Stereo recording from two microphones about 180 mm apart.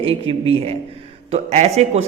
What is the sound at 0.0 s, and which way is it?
Speech, 30° right (ahead or behind).